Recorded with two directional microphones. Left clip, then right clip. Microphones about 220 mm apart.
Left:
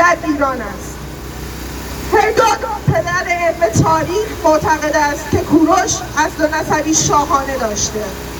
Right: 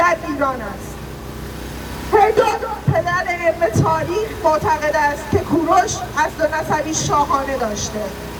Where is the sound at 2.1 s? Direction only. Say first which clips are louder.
Left 2 dB; 15° left (ahead or behind).